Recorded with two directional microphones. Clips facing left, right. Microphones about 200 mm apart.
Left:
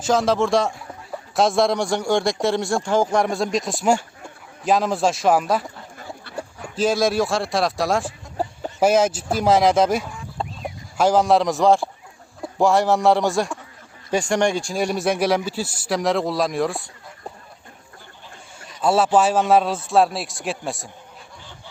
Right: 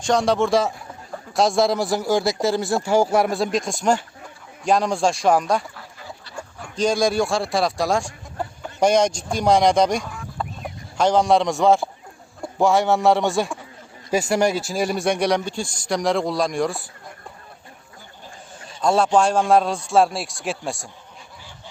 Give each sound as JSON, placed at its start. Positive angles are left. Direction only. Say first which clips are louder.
{"t": 0.0, "sound": "a man's voice", "louder": "even", "side_deg": 0}
{"t": 6.3, "sound": "a sound", "louder": "left 5 dB", "side_deg": 55}
{"t": 6.7, "sound": "a man's voice", "louder": "even", "side_deg": 5}
{"t": 10.4, "sound": "a sound", "louder": "left 1 dB", "side_deg": 25}
{"t": 10.9, "sound": "a man's voice", "louder": "left 1 dB", "side_deg": 5}
{"t": 18.8, "sound": "a man's voice", "louder": "even", "side_deg": 5}